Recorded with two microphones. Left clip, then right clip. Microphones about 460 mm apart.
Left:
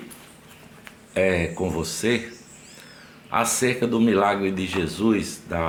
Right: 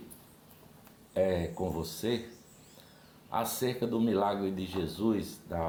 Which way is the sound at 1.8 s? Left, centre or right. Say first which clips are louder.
Left 10 dB; right.